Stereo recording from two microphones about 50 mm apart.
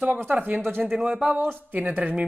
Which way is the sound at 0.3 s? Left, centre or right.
Right.